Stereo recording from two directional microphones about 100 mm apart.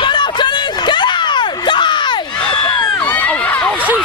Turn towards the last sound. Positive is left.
turn(degrees=10)  # may be behind; listen again after turning